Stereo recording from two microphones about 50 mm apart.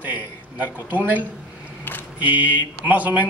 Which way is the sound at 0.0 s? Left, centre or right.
Right.